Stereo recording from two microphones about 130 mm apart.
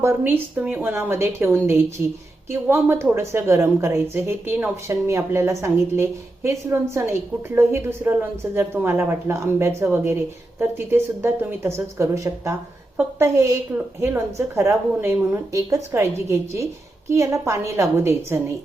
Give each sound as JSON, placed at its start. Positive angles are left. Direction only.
{"t": 0.0, "sound": "a woman's voice", "side_deg": -20}
{"t": 2.5, "sound": "a woman's voice", "side_deg": -20}